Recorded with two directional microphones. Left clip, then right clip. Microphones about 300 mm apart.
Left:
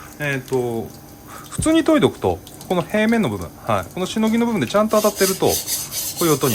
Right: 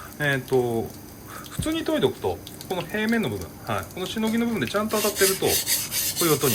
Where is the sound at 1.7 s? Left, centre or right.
Centre.